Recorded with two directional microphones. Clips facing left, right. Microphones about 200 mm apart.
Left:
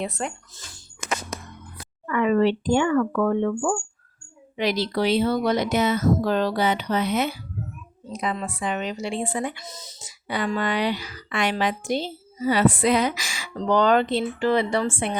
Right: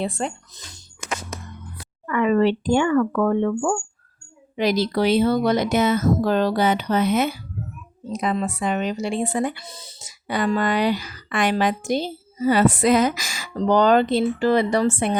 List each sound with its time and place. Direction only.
0.0 s speech: 30° right (ahead or behind)
2.0 s speech: 50° right (ahead or behind)